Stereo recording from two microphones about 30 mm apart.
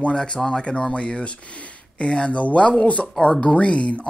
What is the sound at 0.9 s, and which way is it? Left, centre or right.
Mantra, left.